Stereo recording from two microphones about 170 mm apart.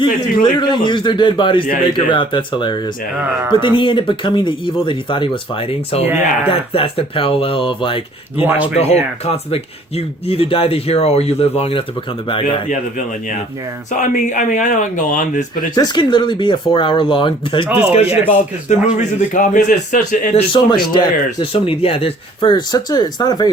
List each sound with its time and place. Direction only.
0.4 s speech: 25° left (ahead or behind)
6.1 s speech: 10° right (ahead or behind)
6.5 s speech: 35° left (ahead or behind)
8.4 s speech: 10° right (ahead or behind)
8.7 s speech: 35° left (ahead or behind)
14.0 s a man's voice: 50° left (ahead or behind)
15.7 s a man's voice: 25° left (ahead or behind); by 20.4 s 50° left (ahead or behind)
20.5 s speech: 30° left (ahead or behind)